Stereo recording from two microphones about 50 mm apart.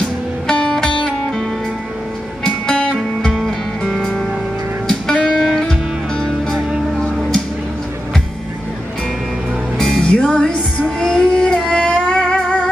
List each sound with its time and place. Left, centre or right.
0.5 s music: centre
3.4 s music: centre
5.2 s music: centre
5.6 s music: centre
9.8 s music: centre
11.0 s child singing: centre
11.6 s a sound: centre